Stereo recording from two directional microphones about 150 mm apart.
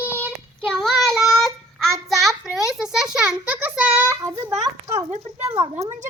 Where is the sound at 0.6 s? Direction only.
Centre (ahead or behind).